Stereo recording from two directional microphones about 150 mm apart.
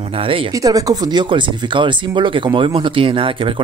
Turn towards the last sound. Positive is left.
turn(degrees=-35)  # may be behind; listen again after turning